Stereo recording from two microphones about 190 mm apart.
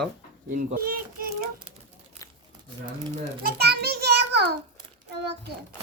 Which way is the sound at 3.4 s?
55° right (ahead or behind).